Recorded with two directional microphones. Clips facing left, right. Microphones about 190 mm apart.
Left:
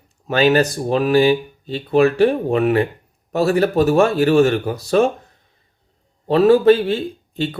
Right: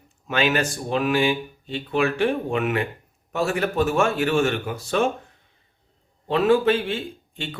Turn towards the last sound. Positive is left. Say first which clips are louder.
# left 10 dB
turn(degrees=35)  # may be behind; listen again after turning